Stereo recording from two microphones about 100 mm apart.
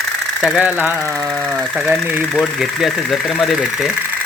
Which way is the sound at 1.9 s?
Centre (ahead or behind).